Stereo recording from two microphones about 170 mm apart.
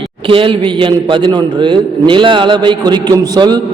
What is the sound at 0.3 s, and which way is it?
A man's voice, 30° right (ahead or behind).